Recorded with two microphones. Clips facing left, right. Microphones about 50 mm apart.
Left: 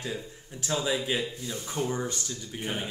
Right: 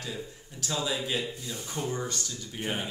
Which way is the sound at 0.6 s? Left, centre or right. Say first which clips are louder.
Left 3 dB; left.